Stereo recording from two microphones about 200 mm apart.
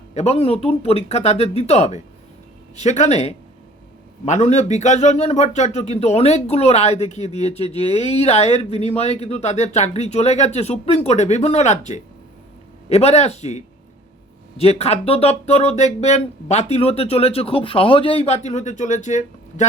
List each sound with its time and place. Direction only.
0.1 s a man's voice: 30° left (ahead or behind)
14.6 s a man's voice: 30° left (ahead or behind)